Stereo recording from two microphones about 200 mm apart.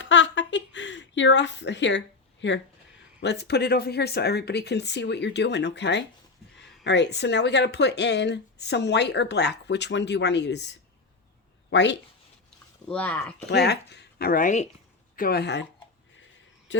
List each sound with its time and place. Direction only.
0.0 s a sound: 70° left (ahead or behind)
3.2 s speech: 55° left (ahead or behind)
12.9 s speech: 5° left (ahead or behind)
13.5 s speech: 55° left (ahead or behind)